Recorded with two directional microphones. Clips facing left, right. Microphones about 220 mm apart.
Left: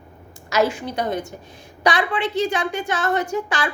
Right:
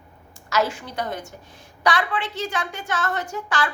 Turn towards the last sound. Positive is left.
turn(degrees=15)  # may be behind; listen again after turning